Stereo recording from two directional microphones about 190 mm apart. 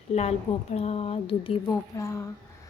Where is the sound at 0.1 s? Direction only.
35° left (ahead or behind).